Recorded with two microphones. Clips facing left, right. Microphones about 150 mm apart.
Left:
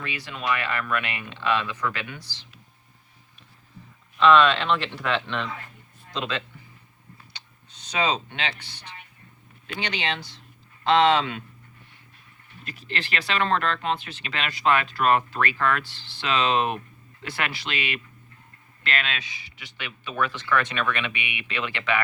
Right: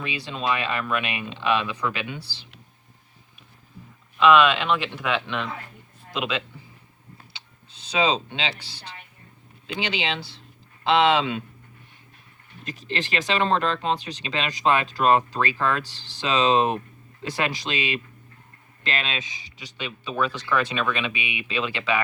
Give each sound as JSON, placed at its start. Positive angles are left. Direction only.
{"t": 0.0, "sound": "speech", "side_deg": -20}
{"t": 4.2, "sound": "speech", "side_deg": -5}
{"t": 8.0, "sound": "speech", "side_deg": -10}
{"t": 8.7, "sound": "speech", "side_deg": -35}
{"t": 9.6, "sound": "speech", "side_deg": -10}
{"t": 11.2, "sound": "speech", "side_deg": -20}
{"t": 12.9, "sound": "speech", "side_deg": -20}